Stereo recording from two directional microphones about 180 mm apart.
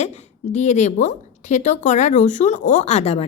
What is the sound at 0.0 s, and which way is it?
A woman's voice, 40° left (ahead or behind).